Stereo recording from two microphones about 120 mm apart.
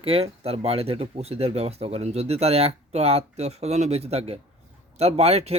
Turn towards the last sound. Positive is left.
turn(degrees=-60)  # may be behind; listen again after turning